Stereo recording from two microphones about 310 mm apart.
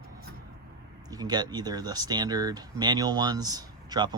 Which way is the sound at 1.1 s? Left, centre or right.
Centre.